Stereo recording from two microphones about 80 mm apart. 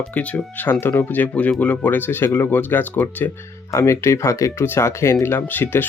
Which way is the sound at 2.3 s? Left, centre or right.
Left.